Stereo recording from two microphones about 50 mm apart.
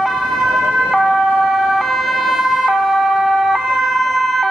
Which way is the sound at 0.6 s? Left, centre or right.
Centre.